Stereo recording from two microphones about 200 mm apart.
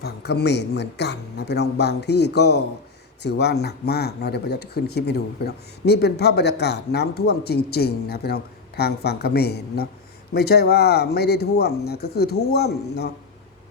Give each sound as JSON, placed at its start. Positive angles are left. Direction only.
{"t": 0.0, "sound": "a man's voice", "side_deg": 55}